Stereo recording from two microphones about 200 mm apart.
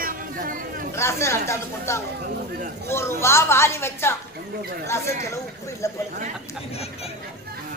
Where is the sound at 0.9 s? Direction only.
15° left (ahead or behind).